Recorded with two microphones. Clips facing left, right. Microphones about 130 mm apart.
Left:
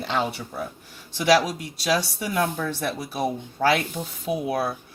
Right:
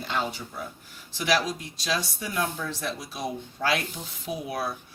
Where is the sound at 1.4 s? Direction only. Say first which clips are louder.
Left 5 dB; 70° left (ahead or behind).